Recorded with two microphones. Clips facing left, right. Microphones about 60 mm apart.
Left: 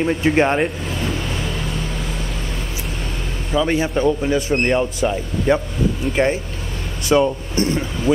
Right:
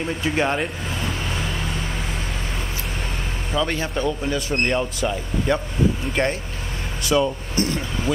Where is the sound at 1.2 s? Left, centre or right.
Centre.